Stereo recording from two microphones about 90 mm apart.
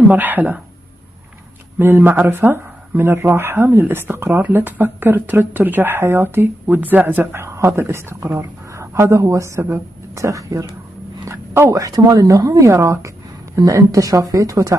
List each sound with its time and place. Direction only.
0.1 s speech: 20° right (ahead or behind)
1.8 s speech: 25° right (ahead or behind); by 10.7 s 40° right (ahead or behind)
11.2 s a sound: 25° right (ahead or behind)
11.7 s speech: 40° right (ahead or behind)